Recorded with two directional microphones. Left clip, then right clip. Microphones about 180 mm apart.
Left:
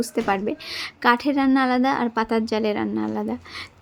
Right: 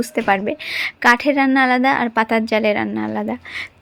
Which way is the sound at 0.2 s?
10° right (ahead or behind).